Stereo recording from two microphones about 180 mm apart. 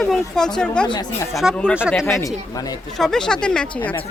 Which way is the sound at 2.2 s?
20° left (ahead or behind).